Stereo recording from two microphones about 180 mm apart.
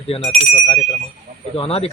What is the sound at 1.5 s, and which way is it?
Speech, 35° left (ahead or behind).